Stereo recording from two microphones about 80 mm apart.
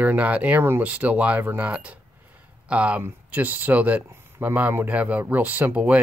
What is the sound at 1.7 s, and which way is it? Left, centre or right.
Speech, centre.